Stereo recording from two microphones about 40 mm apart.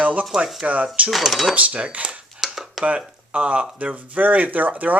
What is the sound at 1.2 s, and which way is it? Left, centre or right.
Speech, centre.